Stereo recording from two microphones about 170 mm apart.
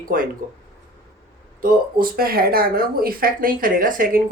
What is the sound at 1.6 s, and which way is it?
Speech, 60° right (ahead or behind).